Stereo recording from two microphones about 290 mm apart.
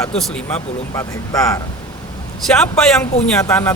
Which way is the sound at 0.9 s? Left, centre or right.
Centre.